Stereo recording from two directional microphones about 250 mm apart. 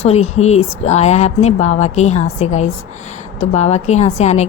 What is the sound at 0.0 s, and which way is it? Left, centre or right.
A woman's voice, left.